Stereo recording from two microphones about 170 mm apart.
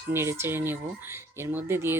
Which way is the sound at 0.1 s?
15° right (ahead or behind).